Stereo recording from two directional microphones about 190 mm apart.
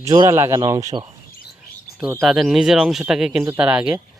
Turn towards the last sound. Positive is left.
turn(degrees=-5)  # may be behind; listen again after turning